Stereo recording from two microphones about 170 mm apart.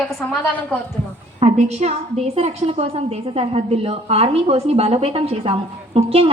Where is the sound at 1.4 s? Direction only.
40° right (ahead or behind).